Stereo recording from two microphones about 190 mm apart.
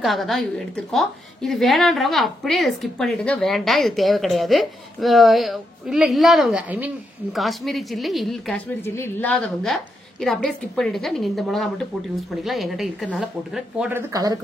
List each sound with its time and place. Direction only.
0.0 s a woman's voice: centre (ahead or behind)
8.8 s a woman's voice: 10° left (ahead or behind); by 14.0 s 5° right (ahead or behind)
14.1 s speech: 20° right (ahead or behind)